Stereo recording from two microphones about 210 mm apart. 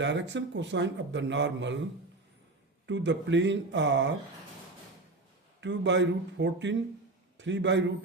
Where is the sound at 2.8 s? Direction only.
55° right (ahead or behind).